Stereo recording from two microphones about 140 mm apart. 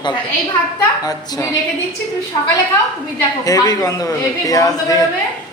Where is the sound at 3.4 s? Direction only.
25° left (ahead or behind).